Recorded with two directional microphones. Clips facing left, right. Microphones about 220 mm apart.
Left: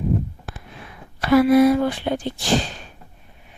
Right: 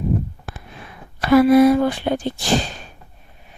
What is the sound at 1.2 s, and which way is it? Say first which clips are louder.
Speech: right 2 dB; 45° right (ahead or behind).